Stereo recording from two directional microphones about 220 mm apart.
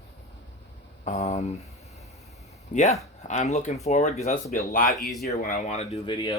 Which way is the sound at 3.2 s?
35° left (ahead or behind).